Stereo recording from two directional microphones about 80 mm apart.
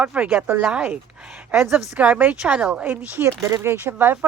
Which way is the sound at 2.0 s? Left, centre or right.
Centre.